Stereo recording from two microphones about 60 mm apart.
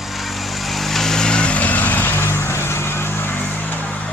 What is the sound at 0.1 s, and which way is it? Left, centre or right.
Vehicle, centre.